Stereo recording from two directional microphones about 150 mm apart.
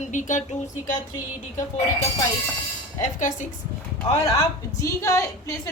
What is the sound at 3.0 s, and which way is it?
Speech, 55° left (ahead or behind).